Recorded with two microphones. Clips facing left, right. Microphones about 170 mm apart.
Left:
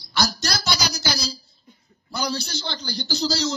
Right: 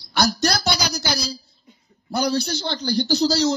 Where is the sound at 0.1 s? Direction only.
55° right (ahead or behind).